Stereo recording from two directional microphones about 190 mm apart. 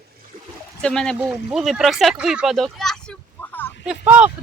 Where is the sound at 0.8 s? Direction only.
5° left (ahead or behind).